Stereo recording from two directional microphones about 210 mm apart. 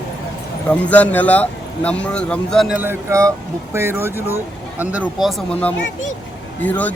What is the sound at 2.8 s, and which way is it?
Speech, 10° right (ahead or behind).